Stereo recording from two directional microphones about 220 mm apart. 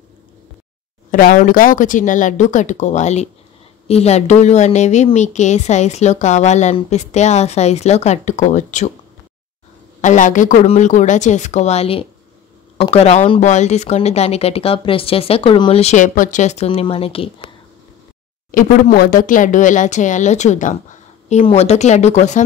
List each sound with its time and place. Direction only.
1.1 s a woman's voice: 40° left (ahead or behind)
10.0 s a woman's voice: 35° left (ahead or behind)
18.5 s a woman's voice: 40° left (ahead or behind)